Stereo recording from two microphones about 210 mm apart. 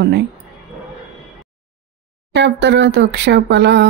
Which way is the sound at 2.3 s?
55° right (ahead or behind).